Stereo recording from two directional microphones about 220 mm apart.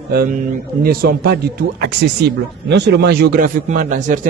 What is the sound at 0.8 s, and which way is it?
A man's voice, 45° right (ahead or behind).